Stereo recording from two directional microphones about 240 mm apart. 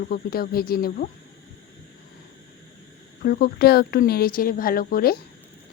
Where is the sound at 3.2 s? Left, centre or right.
Left.